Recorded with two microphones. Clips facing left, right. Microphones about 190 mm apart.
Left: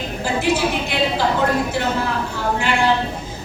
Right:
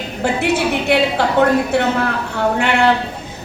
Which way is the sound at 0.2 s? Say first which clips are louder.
Right 3 dB; 65° right (ahead or behind).